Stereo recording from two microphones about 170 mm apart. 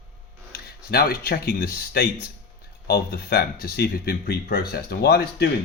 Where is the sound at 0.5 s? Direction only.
65° left (ahead or behind).